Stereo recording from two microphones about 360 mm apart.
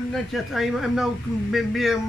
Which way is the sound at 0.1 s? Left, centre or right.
Centre.